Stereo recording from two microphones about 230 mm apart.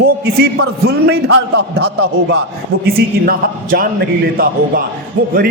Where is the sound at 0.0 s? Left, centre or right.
Right.